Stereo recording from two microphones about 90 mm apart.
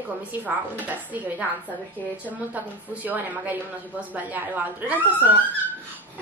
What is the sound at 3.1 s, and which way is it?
A woman's voice, 20° right (ahead or behind).